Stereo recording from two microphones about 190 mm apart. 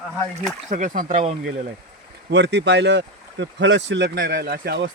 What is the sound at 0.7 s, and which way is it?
Speech, 45° right (ahead or behind).